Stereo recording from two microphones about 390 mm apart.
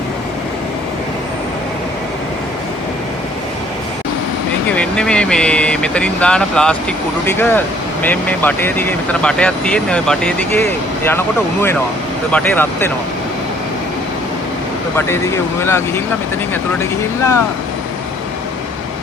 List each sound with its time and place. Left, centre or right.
4.6 s speech: centre
12.3 s speech: centre
14.9 s speech: centre